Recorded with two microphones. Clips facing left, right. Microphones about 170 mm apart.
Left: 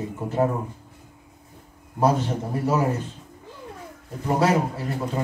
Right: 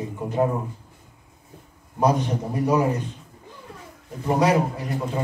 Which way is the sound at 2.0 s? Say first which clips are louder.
Even; 15° right (ahead or behind).